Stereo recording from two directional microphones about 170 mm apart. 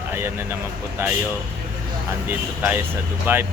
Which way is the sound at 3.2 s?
10° right (ahead or behind).